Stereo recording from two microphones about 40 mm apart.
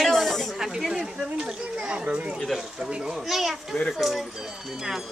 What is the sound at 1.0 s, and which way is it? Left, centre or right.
Speech, right.